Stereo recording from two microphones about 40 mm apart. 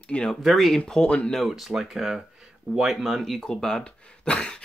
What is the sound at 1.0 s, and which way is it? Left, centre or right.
Speech, left.